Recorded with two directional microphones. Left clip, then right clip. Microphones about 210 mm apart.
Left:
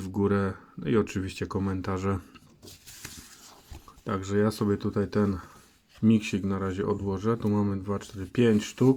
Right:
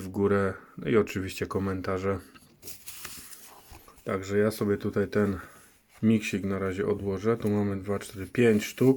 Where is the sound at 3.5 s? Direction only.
5° left (ahead or behind).